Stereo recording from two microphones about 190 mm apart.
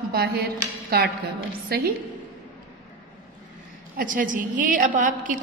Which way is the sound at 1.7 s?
55° right (ahead or behind).